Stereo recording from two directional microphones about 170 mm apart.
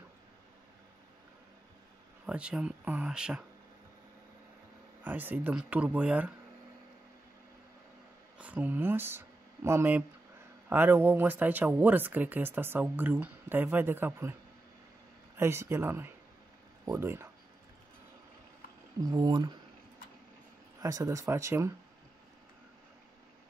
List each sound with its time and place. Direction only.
2.2 s speech: 5° right (ahead or behind)
5.0 s speech: 10° right (ahead or behind)
8.4 s speech: 10° right (ahead or behind)
15.3 s speech: 15° right (ahead or behind)
18.9 s speech: 25° right (ahead or behind)
20.8 s speech: 20° right (ahead or behind)